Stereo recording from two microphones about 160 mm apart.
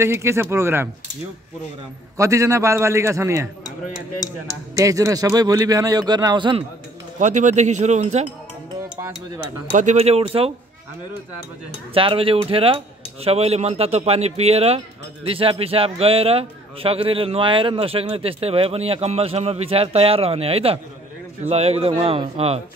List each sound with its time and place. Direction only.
0.0 s speech: 15° right (ahead or behind)
2.1 s a man's voice: 20° right (ahead or behind)
4.7 s a man's voice: 20° right (ahead or behind)
7.2 s speech: 50° right (ahead or behind)
9.8 s a man's voice: 45° right (ahead or behind)
11.9 s a man's voice: 35° right (ahead or behind)